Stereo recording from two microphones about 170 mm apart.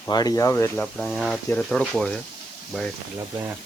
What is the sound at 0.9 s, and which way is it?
Speech, centre (ahead or behind).